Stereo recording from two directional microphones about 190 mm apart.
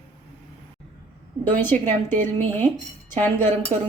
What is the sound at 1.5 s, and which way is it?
Speech, 10° left (ahead or behind).